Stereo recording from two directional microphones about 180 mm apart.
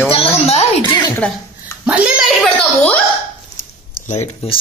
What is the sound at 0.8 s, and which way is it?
Speech, 25° left (ahead or behind).